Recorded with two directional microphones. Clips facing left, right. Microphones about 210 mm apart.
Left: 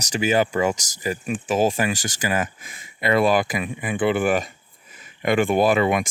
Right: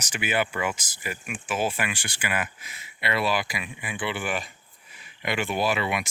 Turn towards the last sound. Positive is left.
turn(degrees=45)  # may be behind; listen again after turning